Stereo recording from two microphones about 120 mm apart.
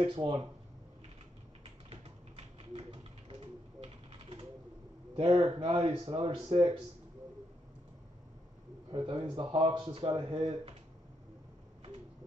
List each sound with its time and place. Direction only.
0.0 s speech: 45° right (ahead or behind)
1.6 s a sound: 55° right (ahead or behind)
5.1 s speech: 55° right (ahead or behind)
8.9 s speech: 45° right (ahead or behind)